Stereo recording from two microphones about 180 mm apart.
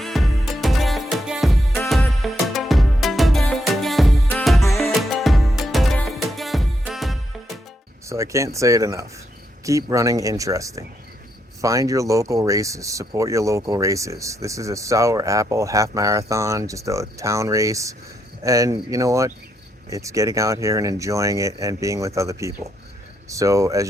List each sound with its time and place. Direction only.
0.0 s music: centre (ahead or behind)
8.0 s speech: 15° right (ahead or behind)